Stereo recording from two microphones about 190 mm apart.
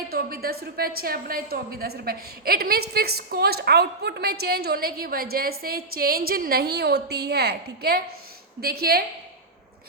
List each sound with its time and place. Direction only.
0.1 s a woman's voice: 50° right (ahead or behind)